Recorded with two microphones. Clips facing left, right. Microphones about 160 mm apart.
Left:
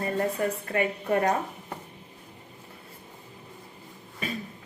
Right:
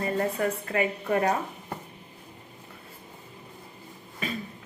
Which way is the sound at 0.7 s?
40° left (ahead or behind).